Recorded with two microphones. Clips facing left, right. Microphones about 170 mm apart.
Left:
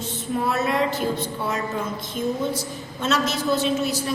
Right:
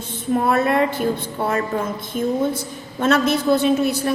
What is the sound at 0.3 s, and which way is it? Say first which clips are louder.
A woman's voice: right 5 dB; 55° right (ahead or behind).